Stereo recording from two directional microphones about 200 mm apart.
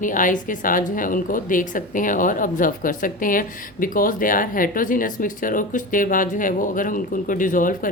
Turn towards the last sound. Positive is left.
turn(degrees=40)  # may be behind; listen again after turning